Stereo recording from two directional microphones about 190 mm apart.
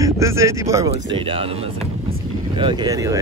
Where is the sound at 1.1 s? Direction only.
25° right (ahead or behind).